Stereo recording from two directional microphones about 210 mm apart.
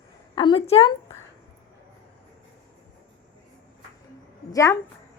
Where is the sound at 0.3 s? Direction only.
25° left (ahead or behind).